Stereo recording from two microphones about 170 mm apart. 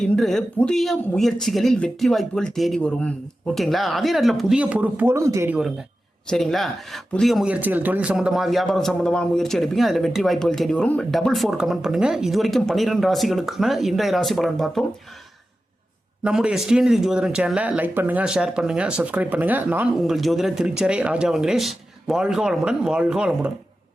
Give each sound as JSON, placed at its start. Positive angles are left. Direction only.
{"t": 0.0, "sound": "speech", "side_deg": 0}
{"t": 6.2, "sound": "speech", "side_deg": 0}
{"t": 16.2, "sound": "speech", "side_deg": -5}